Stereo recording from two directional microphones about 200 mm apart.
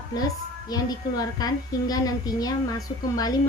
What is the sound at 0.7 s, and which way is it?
A woman's voice, 20° left (ahead or behind).